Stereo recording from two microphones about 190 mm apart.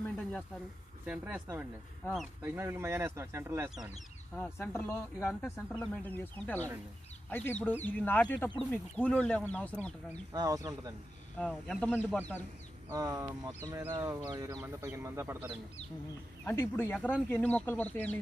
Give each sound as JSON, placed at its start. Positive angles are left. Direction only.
{"t": 0.0, "sound": "a sound", "side_deg": 5}
{"t": 1.0, "sound": "speech", "side_deg": -5}
{"t": 4.4, "sound": "speech", "side_deg": 10}
{"t": 10.3, "sound": "speech", "side_deg": -20}
{"t": 11.3, "sound": "speech", "side_deg": 5}
{"t": 12.9, "sound": "speech", "side_deg": -20}
{"t": 16.4, "sound": "speech", "side_deg": 10}